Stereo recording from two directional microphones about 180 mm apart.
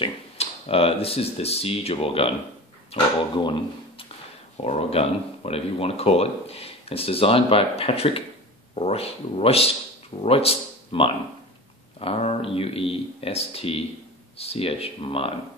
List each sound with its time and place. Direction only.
0.0 s speech: 30° left (ahead or behind)